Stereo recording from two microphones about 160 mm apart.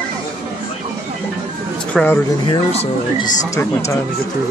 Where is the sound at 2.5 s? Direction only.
40° left (ahead or behind).